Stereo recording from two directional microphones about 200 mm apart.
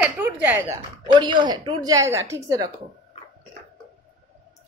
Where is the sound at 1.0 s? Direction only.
20° right (ahead or behind).